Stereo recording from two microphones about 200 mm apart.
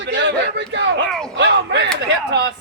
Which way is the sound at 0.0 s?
60° right (ahead or behind).